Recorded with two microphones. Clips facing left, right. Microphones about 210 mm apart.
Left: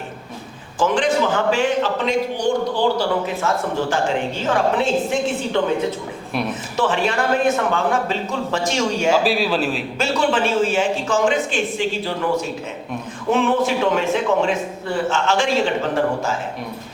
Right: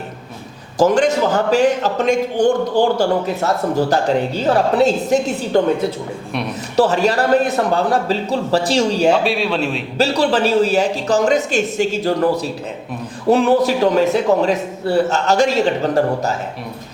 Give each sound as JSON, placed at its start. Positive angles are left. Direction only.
{"t": 0.8, "sound": "a man's voice", "side_deg": -40}
{"t": 6.7, "sound": "a man's voice", "side_deg": -40}
{"t": 9.2, "sound": "a man's voice", "side_deg": 0}
{"t": 10.0, "sound": "a man's voice", "side_deg": -35}